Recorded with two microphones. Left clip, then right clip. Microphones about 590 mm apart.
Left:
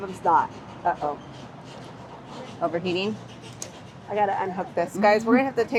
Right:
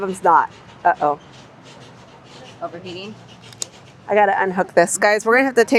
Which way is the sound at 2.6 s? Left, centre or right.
Centre.